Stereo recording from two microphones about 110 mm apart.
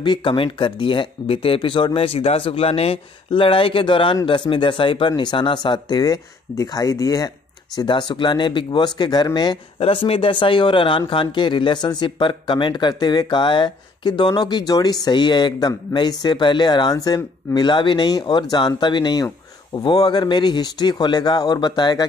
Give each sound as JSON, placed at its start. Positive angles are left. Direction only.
{"t": 0.0, "sound": "speech", "side_deg": 50}
{"t": 2.0, "sound": "speech", "side_deg": 60}
{"t": 9.8, "sound": "speech", "side_deg": 60}
{"t": 17.6, "sound": "speech", "side_deg": 45}